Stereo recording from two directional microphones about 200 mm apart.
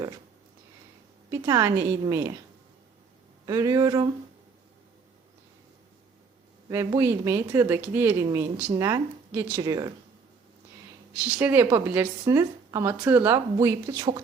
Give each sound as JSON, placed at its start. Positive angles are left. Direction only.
{"t": 1.3, "sound": "speech", "side_deg": -15}
{"t": 3.4, "sound": "speech", "side_deg": -20}
{"t": 6.7, "sound": "speech", "side_deg": -15}
{"t": 11.1, "sound": "speech", "side_deg": -10}